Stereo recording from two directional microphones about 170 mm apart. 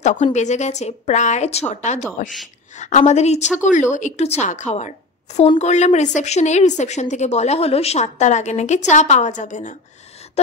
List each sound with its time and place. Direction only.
0.0 s a woman's voice: 45° left (ahead or behind)